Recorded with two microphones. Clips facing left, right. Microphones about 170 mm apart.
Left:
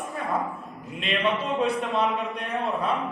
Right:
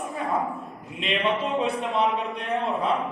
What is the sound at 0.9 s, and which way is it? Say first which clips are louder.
A man's voice: right 1 dB; 20° right (ahead or behind).